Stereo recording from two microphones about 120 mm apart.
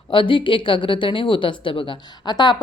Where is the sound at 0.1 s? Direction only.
45° left (ahead or behind).